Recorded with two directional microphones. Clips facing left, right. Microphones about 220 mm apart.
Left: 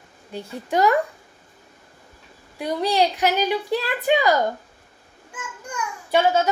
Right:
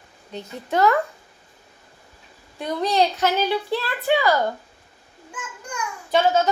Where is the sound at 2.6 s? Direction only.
10° left (ahead or behind).